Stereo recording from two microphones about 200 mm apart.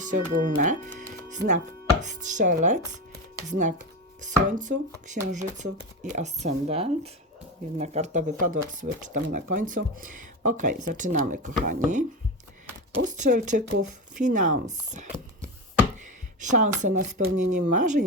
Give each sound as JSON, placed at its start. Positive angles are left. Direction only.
{"t": 0.0, "sound": "speech", "side_deg": -40}
{"t": 13.1, "sound": "speech", "side_deg": -40}
{"t": 16.4, "sound": "speech", "side_deg": -40}